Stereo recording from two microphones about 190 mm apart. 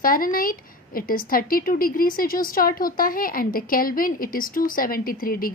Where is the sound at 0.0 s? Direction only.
50° left (ahead or behind).